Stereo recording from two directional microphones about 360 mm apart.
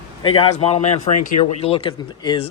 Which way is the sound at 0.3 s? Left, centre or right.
Centre.